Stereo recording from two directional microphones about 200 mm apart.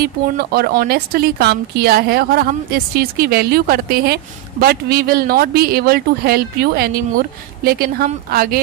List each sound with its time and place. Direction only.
0.0 s speech: 50° right (ahead or behind)